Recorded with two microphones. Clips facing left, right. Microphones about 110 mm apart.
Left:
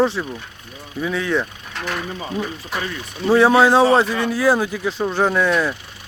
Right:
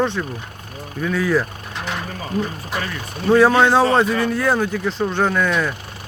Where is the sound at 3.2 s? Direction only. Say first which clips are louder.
Even; centre (ahead or behind).